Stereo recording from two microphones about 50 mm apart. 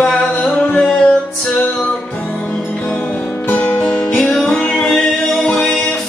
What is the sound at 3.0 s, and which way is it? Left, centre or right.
Music, left.